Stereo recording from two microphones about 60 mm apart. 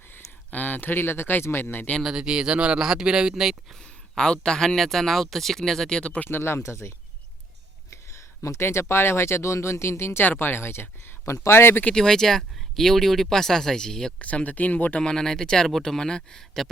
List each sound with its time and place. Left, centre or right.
0.5 s speech: left
2.1 s speech: centre
4.2 s speech: centre
6.2 s speech: left
10.2 s speech: left
11.9 s speech: centre
14.2 s speech: left
15.0 s speech: centre